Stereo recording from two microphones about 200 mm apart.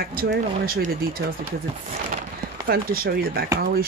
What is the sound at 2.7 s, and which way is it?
Speech, 50° right (ahead or behind).